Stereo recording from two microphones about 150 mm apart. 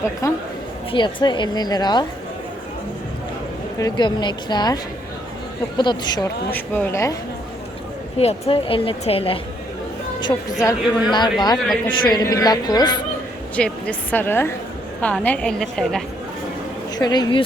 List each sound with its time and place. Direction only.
0.2 s a woman's voice: 20° left (ahead or behind)
3.8 s a woman's voice: 25° left (ahead or behind)
6.5 s a woman's voice: 10° left (ahead or behind)
8.2 s a woman's voice: 40° left (ahead or behind)
11.5 s a woman's voice: 5° left (ahead or behind)
12.1 s a woman's voice: 25° left (ahead or behind)
13.6 s a woman's voice: 5° left (ahead or behind)
17.0 s a woman's voice: 30° left (ahead or behind)